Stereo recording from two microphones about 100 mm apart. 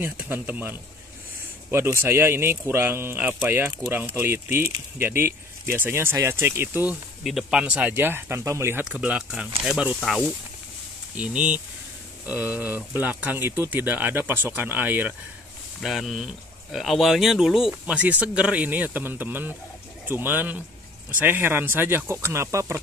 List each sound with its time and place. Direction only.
0.0 s speech: 20° right (ahead or behind)
7.2 s speech: centre (ahead or behind)
7.6 s speech: 15° right (ahead or behind)
8.8 s speech: 10° right (ahead or behind)
11.1 s speech: 10° right (ahead or behind)
15.8 s speech: centre (ahead or behind); by 22.8 s 30° right (ahead or behind)